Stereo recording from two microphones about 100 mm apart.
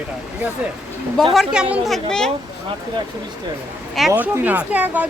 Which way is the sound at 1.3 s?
10° right (ahead or behind).